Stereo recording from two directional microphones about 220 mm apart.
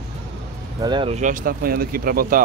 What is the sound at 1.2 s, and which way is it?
Speech, 40° right (ahead or behind).